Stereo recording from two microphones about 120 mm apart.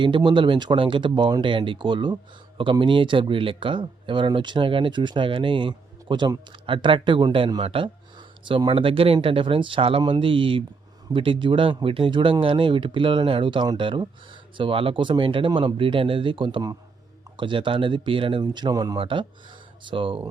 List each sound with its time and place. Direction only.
0.0 s speech: 40° right (ahead or behind)
18.9 s speech: 45° right (ahead or behind)